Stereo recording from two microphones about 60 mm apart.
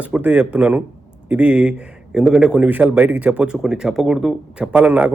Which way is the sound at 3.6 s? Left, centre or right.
Centre.